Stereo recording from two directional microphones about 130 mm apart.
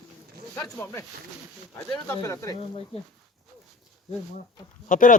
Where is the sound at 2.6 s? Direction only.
50° left (ahead or behind).